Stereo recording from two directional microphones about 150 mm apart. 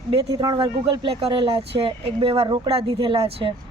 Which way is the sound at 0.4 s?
35° right (ahead or behind).